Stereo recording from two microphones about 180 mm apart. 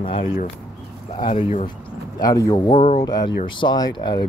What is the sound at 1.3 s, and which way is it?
Speech, 40° left (ahead or behind).